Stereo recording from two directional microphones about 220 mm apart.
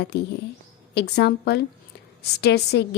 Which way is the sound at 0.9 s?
50° left (ahead or behind).